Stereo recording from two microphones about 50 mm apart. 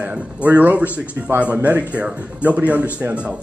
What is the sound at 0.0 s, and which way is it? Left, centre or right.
A woman's voice, right.